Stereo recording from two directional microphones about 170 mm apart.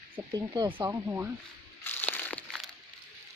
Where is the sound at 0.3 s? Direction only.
25° right (ahead or behind).